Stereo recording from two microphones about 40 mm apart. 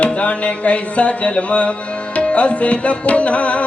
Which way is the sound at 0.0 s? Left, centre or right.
Left.